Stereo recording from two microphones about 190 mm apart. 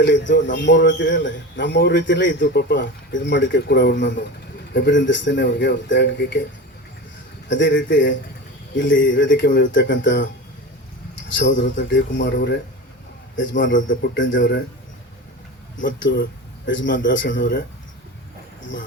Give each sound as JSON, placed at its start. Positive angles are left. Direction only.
{"t": 0.0, "sound": "a man's voice", "side_deg": 70}
{"t": 7.4, "sound": "a man's voice", "side_deg": 75}
{"t": 11.3, "sound": "a man's voice", "side_deg": 75}
{"t": 13.9, "sound": "speech", "side_deg": 50}
{"t": 15.8, "sound": "a man's voice", "side_deg": 75}